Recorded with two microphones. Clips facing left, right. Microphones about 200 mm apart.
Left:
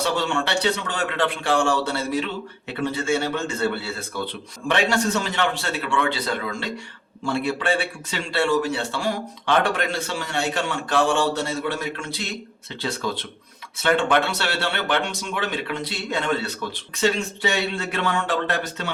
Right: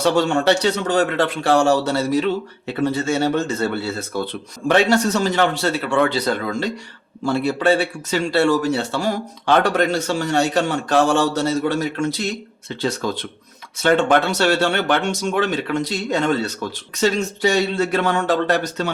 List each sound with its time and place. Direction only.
0.0 s a man's voice: 40° right (ahead or behind)
13.8 s a man's voice: 40° right (ahead or behind)